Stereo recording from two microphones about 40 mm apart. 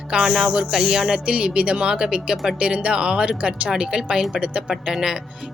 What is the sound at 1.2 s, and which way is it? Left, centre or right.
Speech, right.